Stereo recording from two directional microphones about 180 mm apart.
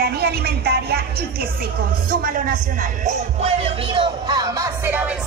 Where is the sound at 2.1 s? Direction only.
50° right (ahead or behind).